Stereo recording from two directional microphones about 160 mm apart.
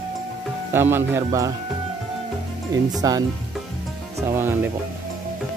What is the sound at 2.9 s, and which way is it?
Speech, 20° right (ahead or behind).